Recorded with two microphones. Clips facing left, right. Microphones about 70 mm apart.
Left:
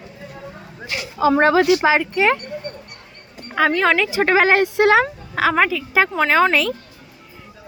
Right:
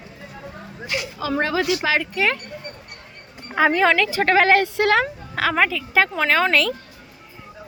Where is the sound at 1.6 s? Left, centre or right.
Left.